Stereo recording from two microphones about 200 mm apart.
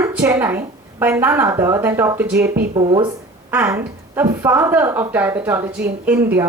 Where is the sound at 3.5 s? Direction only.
10° right (ahead or behind).